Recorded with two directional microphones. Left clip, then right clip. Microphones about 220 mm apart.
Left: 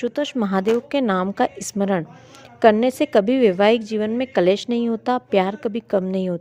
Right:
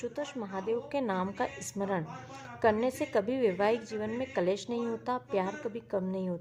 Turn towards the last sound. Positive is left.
turn(degrees=40)  # may be behind; listen again after turning